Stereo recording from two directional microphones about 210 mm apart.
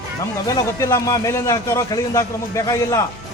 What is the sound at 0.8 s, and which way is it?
A man's voice, 15° left (ahead or behind).